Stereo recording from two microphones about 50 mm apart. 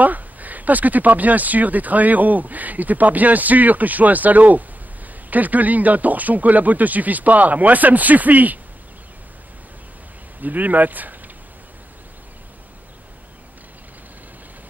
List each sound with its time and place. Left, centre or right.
0.0 s speech: right
10.4 s speech: right